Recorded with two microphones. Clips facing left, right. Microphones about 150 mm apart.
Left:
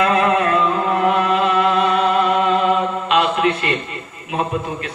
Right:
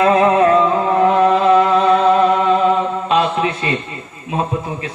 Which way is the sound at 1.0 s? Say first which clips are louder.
Right 6 dB; 30° right (ahead or behind).